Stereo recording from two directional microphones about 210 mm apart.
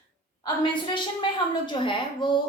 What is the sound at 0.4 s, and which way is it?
A woman's voice, 20° left (ahead or behind).